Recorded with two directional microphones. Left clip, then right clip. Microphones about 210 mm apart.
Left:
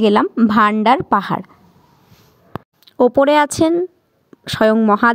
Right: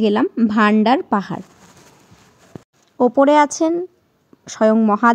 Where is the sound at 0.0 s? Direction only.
40° left (ahead or behind).